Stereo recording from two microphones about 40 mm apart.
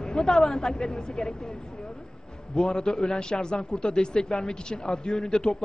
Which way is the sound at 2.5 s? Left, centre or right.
Left.